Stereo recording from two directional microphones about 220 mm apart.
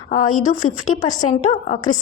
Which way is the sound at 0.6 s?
75° left (ahead or behind).